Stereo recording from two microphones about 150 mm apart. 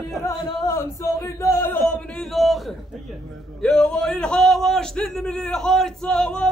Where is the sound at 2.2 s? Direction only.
Centre (ahead or behind).